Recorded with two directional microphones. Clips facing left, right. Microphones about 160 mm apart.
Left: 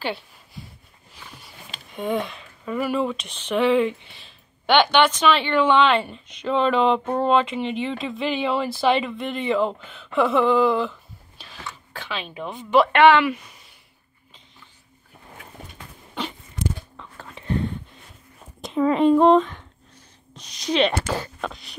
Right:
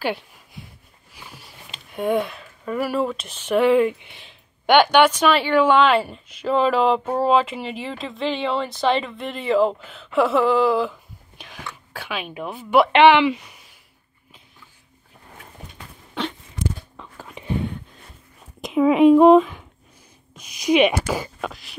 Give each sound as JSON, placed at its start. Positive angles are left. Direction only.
{"t": 0.0, "sound": "a sound", "side_deg": -10}
{"t": 2.0, "sound": "speech", "side_deg": -10}
{"t": 12.9, "sound": "speech", "side_deg": -20}
{"t": 16.2, "sound": "a sound", "side_deg": 0}
{"t": 16.9, "sound": "whispering", "side_deg": -10}
{"t": 18.6, "sound": "speech", "side_deg": -5}